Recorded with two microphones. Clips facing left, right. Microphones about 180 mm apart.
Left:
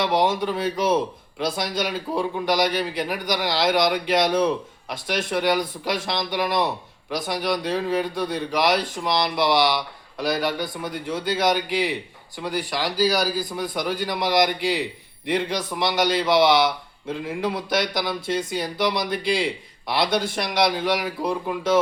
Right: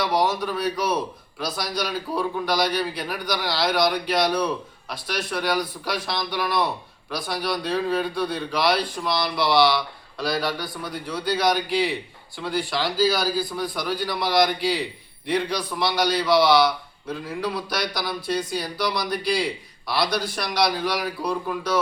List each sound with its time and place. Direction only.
0.0 s a man's voice: 25° left (ahead or behind)